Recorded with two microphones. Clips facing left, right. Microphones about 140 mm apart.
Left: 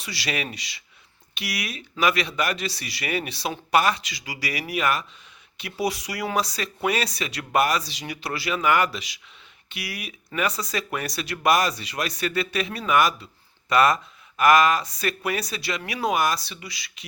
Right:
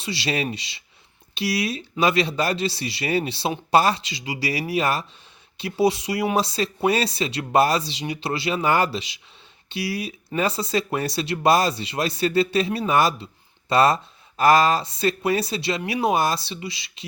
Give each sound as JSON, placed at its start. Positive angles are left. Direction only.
{"t": 0.0, "sound": "speech", "side_deg": -25}